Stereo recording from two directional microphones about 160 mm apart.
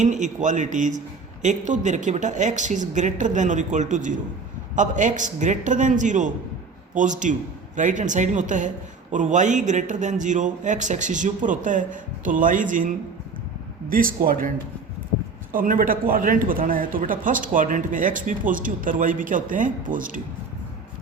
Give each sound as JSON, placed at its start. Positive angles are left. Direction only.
{"t": 0.0, "sound": "a man's voice", "side_deg": -50}
{"t": 13.9, "sound": "speech", "side_deg": -65}
{"t": 15.5, "sound": "speech", "side_deg": -60}